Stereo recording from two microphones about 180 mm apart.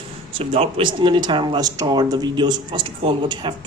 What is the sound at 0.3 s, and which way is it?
Speech, 30° right (ahead or behind).